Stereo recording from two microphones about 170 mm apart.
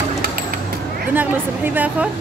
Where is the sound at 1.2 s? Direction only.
10° right (ahead or behind).